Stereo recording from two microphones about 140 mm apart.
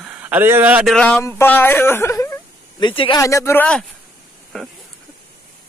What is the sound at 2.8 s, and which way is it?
Speech, 35° left (ahead or behind).